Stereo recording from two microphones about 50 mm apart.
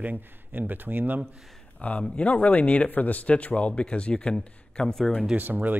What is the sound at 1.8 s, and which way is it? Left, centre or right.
Speech, left.